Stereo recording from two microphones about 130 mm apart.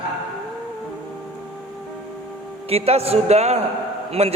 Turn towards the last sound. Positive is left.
turn(degrees=-55)  # may be behind; listen again after turning